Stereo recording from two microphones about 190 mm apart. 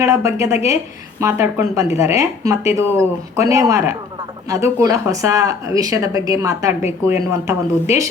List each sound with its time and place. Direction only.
0.0 s speech: 15° right (ahead or behind)